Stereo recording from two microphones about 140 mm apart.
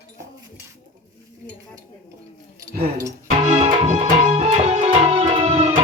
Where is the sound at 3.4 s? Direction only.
55° right (ahead or behind).